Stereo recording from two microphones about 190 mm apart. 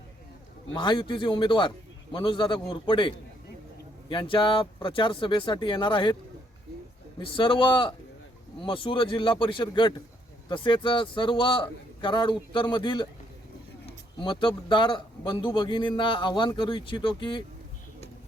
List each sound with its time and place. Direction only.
0.7 s a man's voice: 25° left (ahead or behind)
4.1 s a man's voice: 25° left (ahead or behind)
7.2 s a man's voice: 25° left (ahead or behind)
14.2 s a man's voice: 25° left (ahead or behind)